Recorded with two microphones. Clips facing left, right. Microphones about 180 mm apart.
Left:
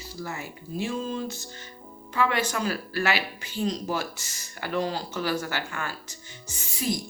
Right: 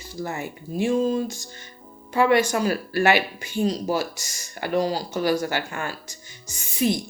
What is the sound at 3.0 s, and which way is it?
Speech, 50° right (ahead or behind).